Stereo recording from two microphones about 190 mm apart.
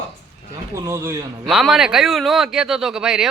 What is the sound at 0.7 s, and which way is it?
Speech, 15° right (ahead or behind).